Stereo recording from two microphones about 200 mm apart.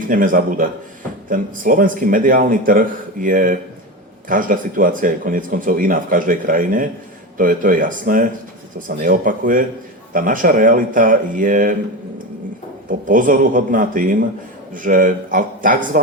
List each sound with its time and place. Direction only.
0.1 s a man's voice: 45° right (ahead or behind)
13.1 s a man's voice: 40° right (ahead or behind)